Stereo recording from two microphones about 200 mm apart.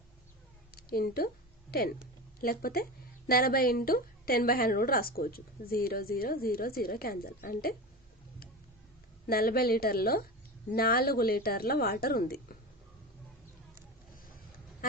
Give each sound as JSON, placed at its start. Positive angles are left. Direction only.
{"t": 0.7, "sound": "a sound", "side_deg": 50}
{"t": 2.4, "sound": "a woman's voice", "side_deg": 45}
{"t": 9.2, "sound": "a woman's voice", "side_deg": 50}